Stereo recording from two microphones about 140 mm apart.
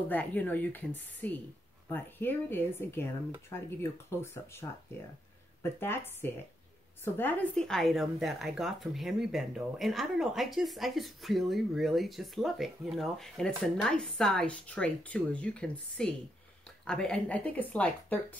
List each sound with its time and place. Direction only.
0.1 s speech: 10° left (ahead or behind)